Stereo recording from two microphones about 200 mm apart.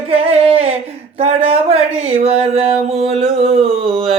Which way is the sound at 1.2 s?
30° right (ahead or behind).